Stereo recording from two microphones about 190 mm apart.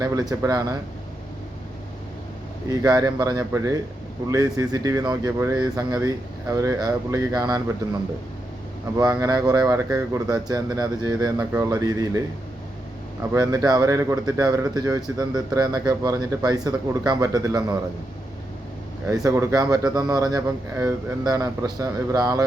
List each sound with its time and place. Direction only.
0.0 s speech: 20° right (ahead or behind)
2.6 s speech: 20° right (ahead or behind)
9.0 s speech: 20° right (ahead or behind)
13.3 s speech: 20° right (ahead or behind)
19.0 s speech: 15° right (ahead or behind)